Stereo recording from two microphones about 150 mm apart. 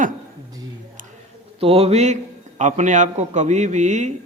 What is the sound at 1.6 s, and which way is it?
A man's voice, 40° right (ahead or behind).